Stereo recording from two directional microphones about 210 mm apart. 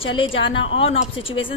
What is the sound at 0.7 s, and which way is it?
Speech, 25° left (ahead or behind).